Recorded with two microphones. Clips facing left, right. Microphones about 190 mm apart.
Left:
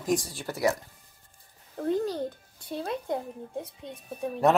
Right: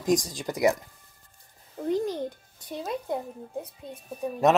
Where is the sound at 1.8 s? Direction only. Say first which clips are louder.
Even; 15° right (ahead or behind).